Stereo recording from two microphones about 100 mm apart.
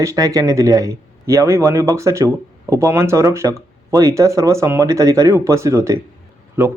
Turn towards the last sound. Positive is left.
turn(degrees=-20)  # may be behind; listen again after turning